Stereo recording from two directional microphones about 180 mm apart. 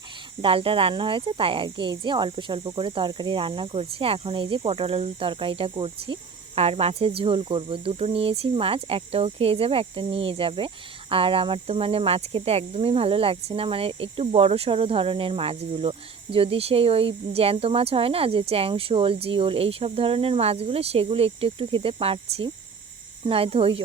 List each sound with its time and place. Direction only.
0.4 s speech: 30° right (ahead or behind)
6.6 s cricket: 35° right (ahead or behind)